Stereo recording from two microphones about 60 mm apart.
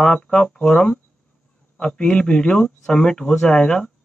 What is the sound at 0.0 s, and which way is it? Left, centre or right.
Speech, centre.